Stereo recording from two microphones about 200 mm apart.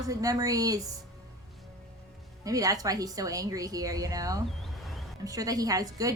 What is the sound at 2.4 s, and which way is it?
A woman's voice, 15° right (ahead or behind).